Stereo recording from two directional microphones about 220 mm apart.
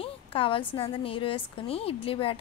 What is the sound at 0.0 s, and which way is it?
A woman's voice, 25° left (ahead or behind).